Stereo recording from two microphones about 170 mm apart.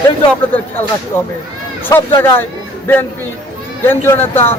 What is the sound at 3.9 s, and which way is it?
Speech, 10° left (ahead or behind).